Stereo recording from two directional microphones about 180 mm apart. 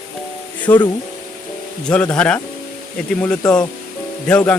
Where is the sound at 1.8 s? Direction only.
5° left (ahead or behind).